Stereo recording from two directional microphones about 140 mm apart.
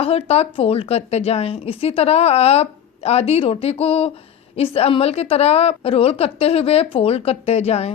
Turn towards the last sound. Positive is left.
turn(degrees=50)  # may be behind; listen again after turning